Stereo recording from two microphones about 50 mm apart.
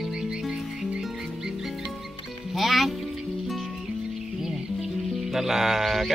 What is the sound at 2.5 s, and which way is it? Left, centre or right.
Speech, centre.